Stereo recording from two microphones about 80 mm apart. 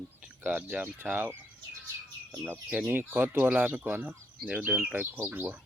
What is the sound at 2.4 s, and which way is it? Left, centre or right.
Speech, centre.